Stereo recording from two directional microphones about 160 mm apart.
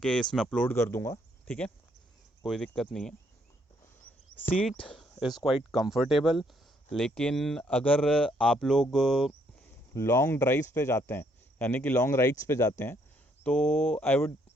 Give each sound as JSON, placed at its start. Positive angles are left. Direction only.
{"t": 0.0, "sound": "speech", "side_deg": 5}
{"t": 2.4, "sound": "speech", "side_deg": 0}
{"t": 4.0, "sound": "a sound", "side_deg": 5}
{"t": 4.8, "sound": "speech", "side_deg": 5}
{"t": 9.9, "sound": "speech", "side_deg": 20}